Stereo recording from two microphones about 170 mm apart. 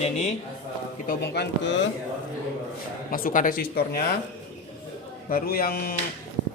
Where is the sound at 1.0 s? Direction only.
75° left (ahead or behind).